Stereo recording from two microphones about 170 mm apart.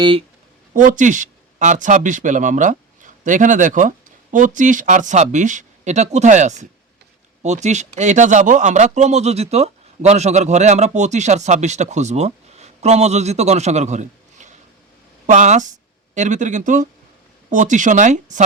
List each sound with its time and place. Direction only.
0.0 s speech: 30° right (ahead or behind)
0.7 s speech: 50° right (ahead or behind)